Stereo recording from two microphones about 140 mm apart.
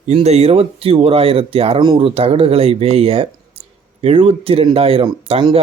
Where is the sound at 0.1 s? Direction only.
45° right (ahead or behind).